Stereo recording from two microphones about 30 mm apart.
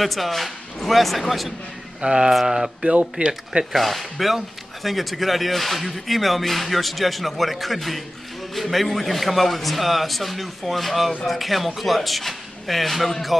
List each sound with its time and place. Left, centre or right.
0.0 s speech: centre
2.0 s speech: right
3.2 s speech: right
3.7 s speech: centre